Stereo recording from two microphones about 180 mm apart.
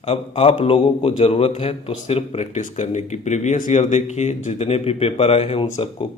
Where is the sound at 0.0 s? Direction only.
35° left (ahead or behind).